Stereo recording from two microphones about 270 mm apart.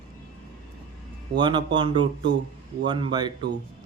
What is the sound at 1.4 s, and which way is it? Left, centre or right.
Speech, centre.